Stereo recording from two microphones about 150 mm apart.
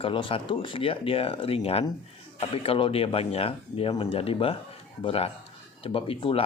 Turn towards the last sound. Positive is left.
turn(degrees=40)  # may be behind; listen again after turning